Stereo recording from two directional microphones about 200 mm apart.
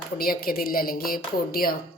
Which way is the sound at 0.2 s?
45° left (ahead or behind).